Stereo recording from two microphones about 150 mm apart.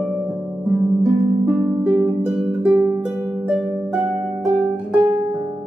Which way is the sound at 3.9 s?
Centre (ahead or behind).